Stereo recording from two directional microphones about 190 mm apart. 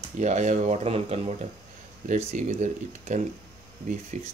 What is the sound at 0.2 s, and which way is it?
Speech, 40° right (ahead or behind).